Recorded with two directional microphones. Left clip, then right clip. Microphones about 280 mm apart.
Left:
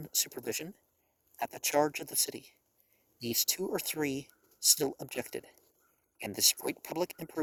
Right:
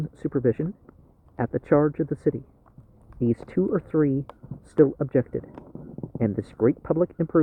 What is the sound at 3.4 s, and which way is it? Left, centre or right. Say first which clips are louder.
Speech: right 8 dB; left.